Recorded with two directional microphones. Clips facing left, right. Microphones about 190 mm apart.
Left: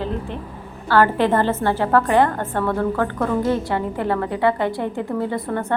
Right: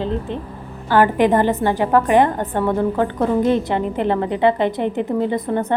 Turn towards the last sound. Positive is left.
turn(degrees=-20)  # may be behind; listen again after turning